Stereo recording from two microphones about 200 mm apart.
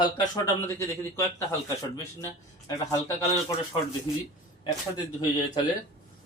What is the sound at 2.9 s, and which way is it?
Speech, 15° left (ahead or behind).